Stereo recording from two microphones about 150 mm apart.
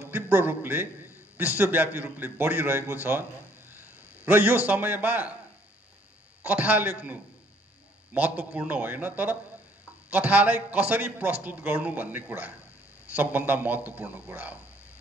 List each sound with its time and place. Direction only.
0.1 s a man's voice: 15° right (ahead or behind)
6.4 s a man's voice: 10° right (ahead or behind)